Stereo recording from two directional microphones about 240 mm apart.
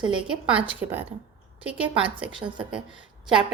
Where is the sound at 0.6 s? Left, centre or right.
Centre.